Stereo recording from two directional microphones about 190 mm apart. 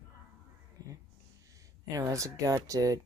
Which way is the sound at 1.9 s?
15° right (ahead or behind).